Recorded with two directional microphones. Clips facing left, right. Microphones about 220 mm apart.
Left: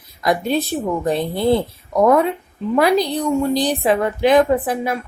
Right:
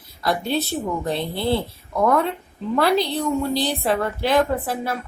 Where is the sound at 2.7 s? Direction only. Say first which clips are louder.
Left 3 dB; 15° left (ahead or behind).